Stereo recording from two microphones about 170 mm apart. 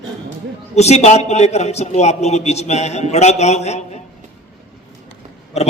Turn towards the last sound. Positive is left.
turn(degrees=40)  # may be behind; listen again after turning